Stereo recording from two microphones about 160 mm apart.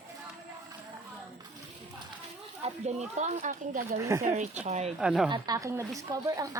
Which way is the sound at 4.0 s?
20° right (ahead or behind).